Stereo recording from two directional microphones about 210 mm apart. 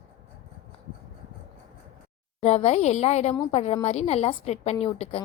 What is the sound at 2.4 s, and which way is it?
A woman's voice, 30° left (ahead or behind).